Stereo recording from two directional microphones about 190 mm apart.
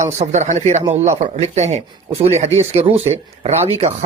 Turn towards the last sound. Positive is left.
turn(degrees=-35)  # may be behind; listen again after turning